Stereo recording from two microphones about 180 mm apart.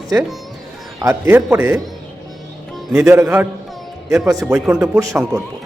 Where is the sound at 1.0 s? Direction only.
15° right (ahead or behind).